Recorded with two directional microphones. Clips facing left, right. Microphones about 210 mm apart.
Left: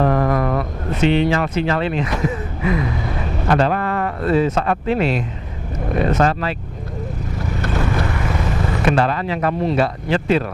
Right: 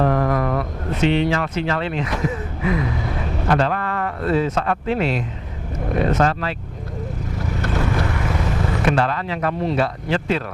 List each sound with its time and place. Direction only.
0.0 s speech: 15° left (ahead or behind)
7.6 s vehicle: 20° left (ahead or behind)
8.8 s speech: 10° left (ahead or behind)